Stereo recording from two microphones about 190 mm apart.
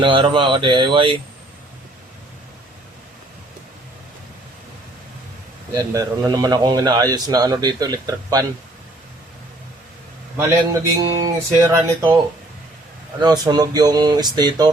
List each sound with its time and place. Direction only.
0.0 s a man's voice: 25° right (ahead or behind)
5.9 s a man's voice: 20° right (ahead or behind)
10.3 s speech: 15° right (ahead or behind)
13.2 s a man's voice: 20° right (ahead or behind)